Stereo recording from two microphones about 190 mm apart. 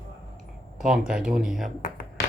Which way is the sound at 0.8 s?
5° right (ahead or behind).